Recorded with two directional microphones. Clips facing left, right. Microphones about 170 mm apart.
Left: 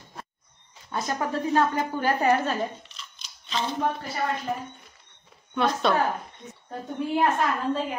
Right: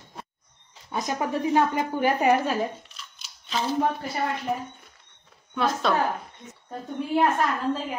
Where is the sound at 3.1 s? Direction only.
5° right (ahead or behind).